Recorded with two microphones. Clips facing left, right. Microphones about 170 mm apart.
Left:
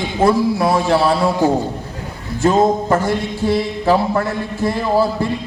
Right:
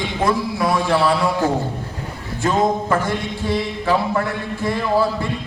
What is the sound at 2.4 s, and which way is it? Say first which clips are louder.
Speech: left 4 dB; 25° left (ahead or behind).